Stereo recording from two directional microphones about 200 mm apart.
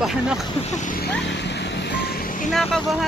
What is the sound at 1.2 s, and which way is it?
Speech, 60° left (ahead or behind).